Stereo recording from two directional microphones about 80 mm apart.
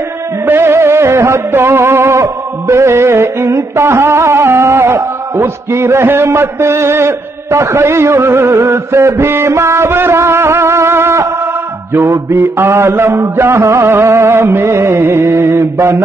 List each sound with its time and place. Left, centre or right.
0.5 s music: right